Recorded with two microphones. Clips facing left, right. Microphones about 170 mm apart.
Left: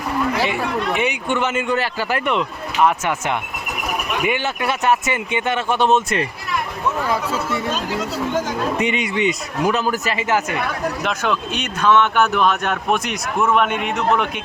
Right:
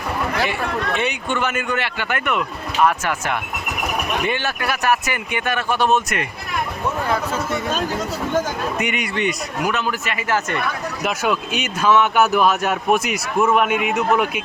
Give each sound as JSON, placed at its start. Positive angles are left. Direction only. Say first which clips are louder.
{"t": 0.9, "sound": "speech", "louder": "left 2 dB", "side_deg": 15}
{"t": 8.8, "sound": "speech", "louder": "left 3 dB", "side_deg": 30}
{"t": 9.6, "sound": "a man's voice", "louder": "left 4 dB", "side_deg": 35}
{"t": 11.0, "sound": "speech", "louder": "right 4 dB", "side_deg": -5}